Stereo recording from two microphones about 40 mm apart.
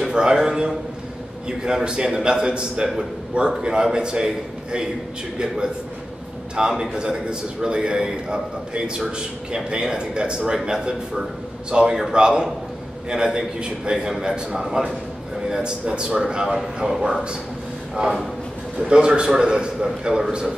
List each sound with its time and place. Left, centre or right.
0.0 s a sound: centre
0.4 s a man's voice: centre
6.5 s a man's voice: centre
16.4 s a man's voice: centre
18.0 s a man's voice: right